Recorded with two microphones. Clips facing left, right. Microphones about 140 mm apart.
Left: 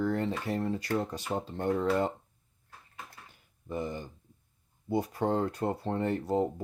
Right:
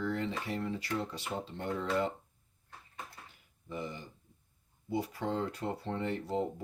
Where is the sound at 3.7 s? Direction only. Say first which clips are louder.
Left 5 dB; 50° left (ahead or behind).